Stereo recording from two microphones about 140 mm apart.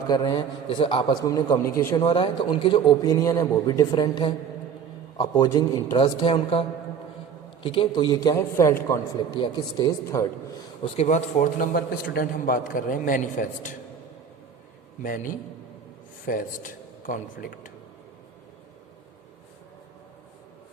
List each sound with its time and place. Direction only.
0.1 s a man's voice: 30° left (ahead or behind)
2.0 s a man's voice: 35° left (ahead or behind)
6.0 s a man's voice: 40° left (ahead or behind)
8.4 s a man's voice: 15° left (ahead or behind)
9.3 s a man's voice: 35° left (ahead or behind)
10.9 s a man's voice: 55° left (ahead or behind)
15.0 s a man's voice: 80° left